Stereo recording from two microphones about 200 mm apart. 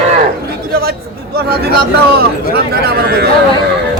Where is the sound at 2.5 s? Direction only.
50° right (ahead or behind).